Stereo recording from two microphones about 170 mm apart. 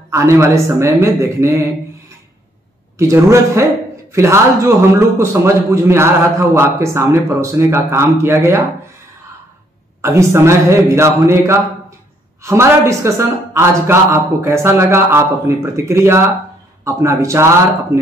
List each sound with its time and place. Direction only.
0.1 s a man's voice: 15° right (ahead or behind)
10.0 s a man's voice: 15° right (ahead or behind)